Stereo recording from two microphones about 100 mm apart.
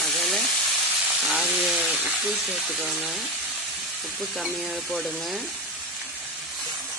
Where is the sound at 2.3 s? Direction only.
5° right (ahead or behind).